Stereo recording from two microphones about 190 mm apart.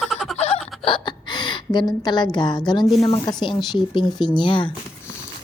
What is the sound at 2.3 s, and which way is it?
Speech, 25° left (ahead or behind).